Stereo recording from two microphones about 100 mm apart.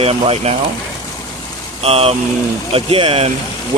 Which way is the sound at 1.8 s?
80° right.